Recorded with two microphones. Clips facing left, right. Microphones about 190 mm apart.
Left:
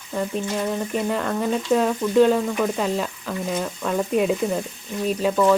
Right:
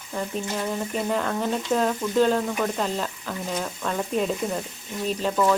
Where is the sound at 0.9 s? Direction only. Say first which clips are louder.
Left 1 dB; centre (ahead or behind).